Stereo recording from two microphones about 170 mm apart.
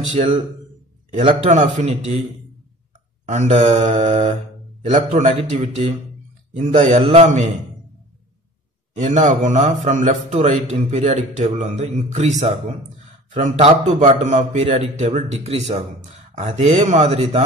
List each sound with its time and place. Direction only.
0.1 s a man's voice: 45° right (ahead or behind)
3.3 s a man's voice: 45° right (ahead or behind)
8.9 s a man's voice: 45° right (ahead or behind)